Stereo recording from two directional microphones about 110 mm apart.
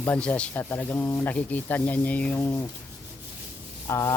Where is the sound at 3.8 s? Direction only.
30° left (ahead or behind).